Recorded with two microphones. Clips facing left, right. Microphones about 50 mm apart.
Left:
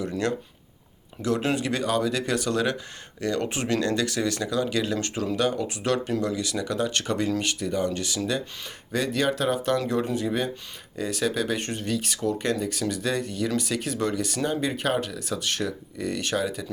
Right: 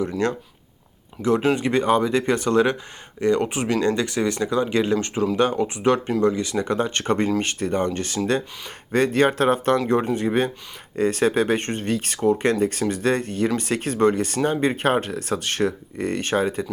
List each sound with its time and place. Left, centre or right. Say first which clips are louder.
1.2 s speech: right 5 dB; right